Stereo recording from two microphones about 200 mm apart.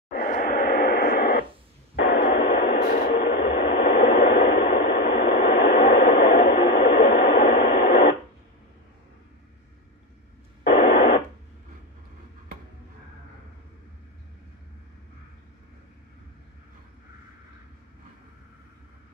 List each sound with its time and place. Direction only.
0.1 s radio: 45° left (ahead or behind)
10.7 s radio: 45° left (ahead or behind)